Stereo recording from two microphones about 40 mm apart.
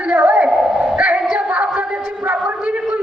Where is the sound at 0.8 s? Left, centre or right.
Right.